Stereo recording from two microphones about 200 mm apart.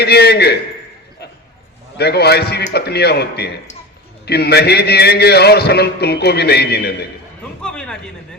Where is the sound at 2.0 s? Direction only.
55° left (ahead or behind).